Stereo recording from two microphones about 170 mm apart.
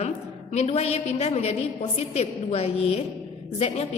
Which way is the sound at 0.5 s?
40° left (ahead or behind).